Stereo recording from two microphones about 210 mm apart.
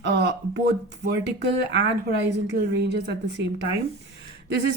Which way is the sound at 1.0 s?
55° right (ahead or behind).